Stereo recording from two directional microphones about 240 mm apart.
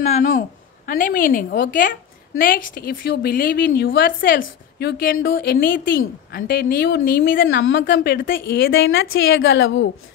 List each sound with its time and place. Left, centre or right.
0.0 s a woman's voice: left
7.6 s a woman's voice: left